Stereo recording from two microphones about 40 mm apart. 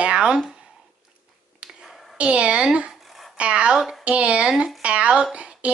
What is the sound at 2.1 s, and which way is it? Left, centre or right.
A woman's voice, right.